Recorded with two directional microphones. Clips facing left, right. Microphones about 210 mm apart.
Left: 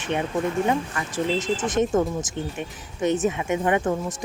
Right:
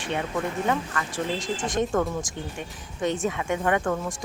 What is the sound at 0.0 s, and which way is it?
Speech, 20° left (ahead or behind).